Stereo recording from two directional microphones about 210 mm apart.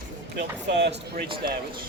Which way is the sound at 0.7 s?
55° right (ahead or behind).